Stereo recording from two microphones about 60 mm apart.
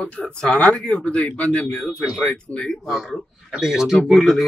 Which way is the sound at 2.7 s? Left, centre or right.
Centre.